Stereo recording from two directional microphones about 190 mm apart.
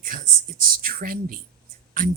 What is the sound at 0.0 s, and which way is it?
Speech, 45° right (ahead or behind).